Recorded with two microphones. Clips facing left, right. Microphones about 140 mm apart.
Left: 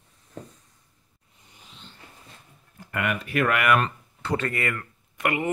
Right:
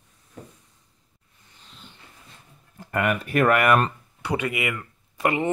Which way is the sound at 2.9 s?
45° right (ahead or behind).